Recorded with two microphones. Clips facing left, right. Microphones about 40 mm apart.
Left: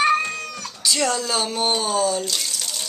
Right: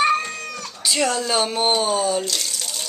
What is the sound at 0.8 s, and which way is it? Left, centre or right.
Speech, centre.